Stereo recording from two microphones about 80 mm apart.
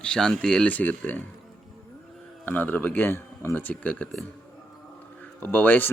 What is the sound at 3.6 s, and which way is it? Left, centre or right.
Speech, centre.